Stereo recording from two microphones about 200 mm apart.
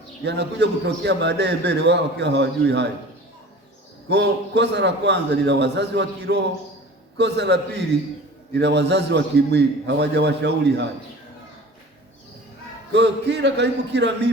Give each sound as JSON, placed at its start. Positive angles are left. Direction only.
{"t": 0.3, "sound": "a man's voice", "side_deg": -60}
{"t": 4.1, "sound": "a man's voice", "side_deg": -60}
{"t": 12.9, "sound": "a man's voice", "side_deg": -60}